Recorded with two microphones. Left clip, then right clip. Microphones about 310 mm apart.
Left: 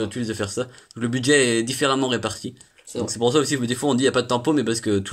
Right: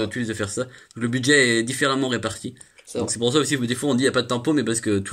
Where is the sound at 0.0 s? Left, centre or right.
Centre.